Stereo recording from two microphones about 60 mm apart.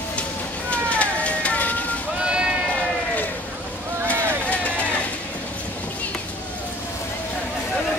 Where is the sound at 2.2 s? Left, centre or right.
Centre.